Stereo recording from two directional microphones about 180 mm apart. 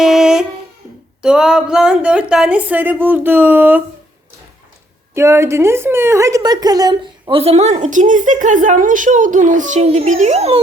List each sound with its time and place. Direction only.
0.0 s a sound: centre (ahead or behind)
1.2 s a woman's voice: 5° right (ahead or behind)
5.1 s a woman's voice: 15° right (ahead or behind); by 10.6 s 35° right (ahead or behind)